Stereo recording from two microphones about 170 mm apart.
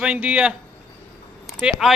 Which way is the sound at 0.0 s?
10° right (ahead or behind).